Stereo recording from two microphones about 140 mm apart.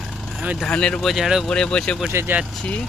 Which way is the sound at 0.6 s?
5° left (ahead or behind).